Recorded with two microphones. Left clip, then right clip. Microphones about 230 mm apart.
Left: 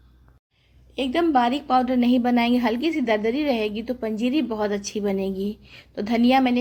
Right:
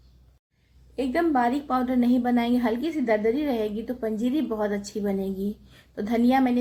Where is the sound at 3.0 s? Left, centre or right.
Left.